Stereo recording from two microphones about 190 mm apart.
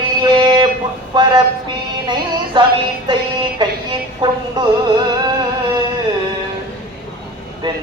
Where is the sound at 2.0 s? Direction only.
25° right (ahead or behind).